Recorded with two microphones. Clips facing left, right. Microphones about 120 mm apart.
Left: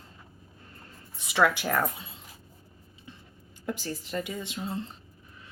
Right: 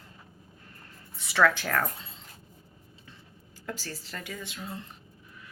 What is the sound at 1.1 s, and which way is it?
Speech, 15° left (ahead or behind).